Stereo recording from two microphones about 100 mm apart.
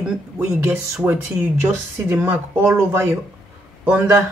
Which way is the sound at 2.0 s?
25° right (ahead or behind).